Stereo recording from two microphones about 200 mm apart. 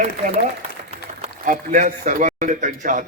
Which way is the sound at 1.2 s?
40° right (ahead or behind).